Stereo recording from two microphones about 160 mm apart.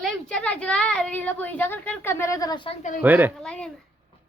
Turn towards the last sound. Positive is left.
turn(degrees=5)  # may be behind; listen again after turning